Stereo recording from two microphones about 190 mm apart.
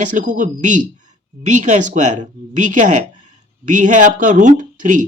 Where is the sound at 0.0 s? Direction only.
40° right (ahead or behind).